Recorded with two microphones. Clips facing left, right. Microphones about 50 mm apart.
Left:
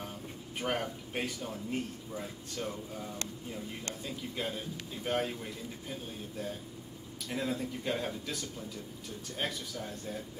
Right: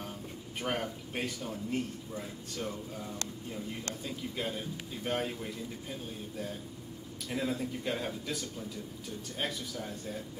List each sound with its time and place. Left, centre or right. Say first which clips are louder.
0.6 s a man's voice: left 1 dB; centre
4.0 s a man's voice: even; centre